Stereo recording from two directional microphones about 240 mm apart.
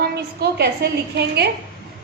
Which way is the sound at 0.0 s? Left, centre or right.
Right.